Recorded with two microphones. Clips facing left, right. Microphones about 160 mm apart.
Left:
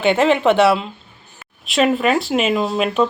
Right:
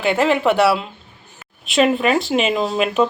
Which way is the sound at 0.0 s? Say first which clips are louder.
Left 2 dB; centre (ahead or behind).